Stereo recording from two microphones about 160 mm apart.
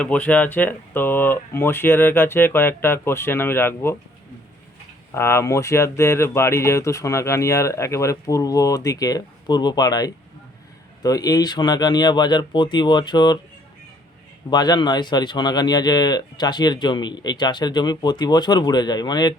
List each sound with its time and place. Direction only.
0.0 s speech: 10° left (ahead or behind)
5.1 s speech: 15° left (ahead or behind)
14.5 s speech: 25° left (ahead or behind)